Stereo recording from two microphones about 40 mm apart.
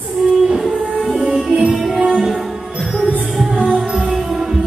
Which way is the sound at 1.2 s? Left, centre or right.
Centre.